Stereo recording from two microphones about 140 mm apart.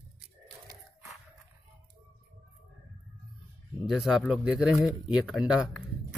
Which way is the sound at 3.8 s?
5° right (ahead or behind).